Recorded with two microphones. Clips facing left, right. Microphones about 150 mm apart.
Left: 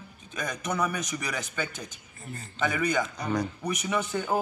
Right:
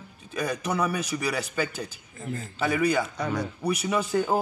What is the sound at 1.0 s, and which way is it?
Speech, 10° right (ahead or behind).